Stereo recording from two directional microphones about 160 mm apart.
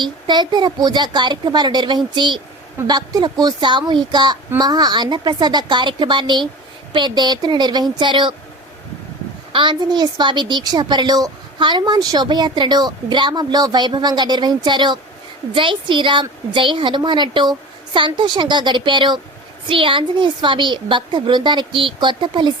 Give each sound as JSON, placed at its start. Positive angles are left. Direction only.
{"t": 0.0, "sound": "a woman's voice", "side_deg": -30}
{"t": 9.5, "sound": "a woman's voice", "side_deg": -30}